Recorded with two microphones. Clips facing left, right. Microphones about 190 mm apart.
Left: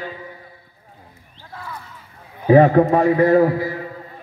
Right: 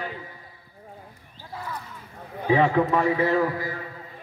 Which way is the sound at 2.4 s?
45° left (ahead or behind).